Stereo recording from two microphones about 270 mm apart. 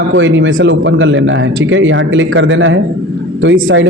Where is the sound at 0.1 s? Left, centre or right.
Right.